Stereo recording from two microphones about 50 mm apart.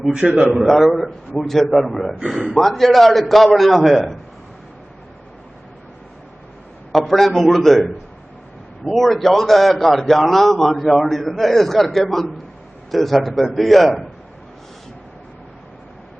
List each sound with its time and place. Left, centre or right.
0.1 s a man's voice: right
0.7 s a man's voice: centre
6.9 s a man's voice: centre
8.8 s a man's voice: centre